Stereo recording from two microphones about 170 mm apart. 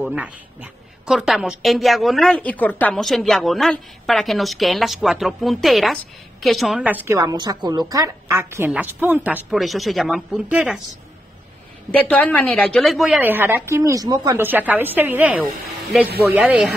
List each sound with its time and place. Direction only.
0.0 s a woman's voice: 5° right (ahead or behind)
11.9 s a woman's voice: 10° left (ahead or behind)